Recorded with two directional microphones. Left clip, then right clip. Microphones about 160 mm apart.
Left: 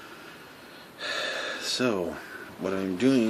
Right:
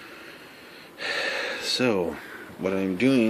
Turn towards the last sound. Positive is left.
turn(degrees=-30)  # may be behind; listen again after turning